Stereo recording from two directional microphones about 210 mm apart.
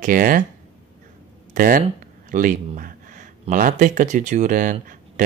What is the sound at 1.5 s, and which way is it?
Speech, 40° right (ahead or behind).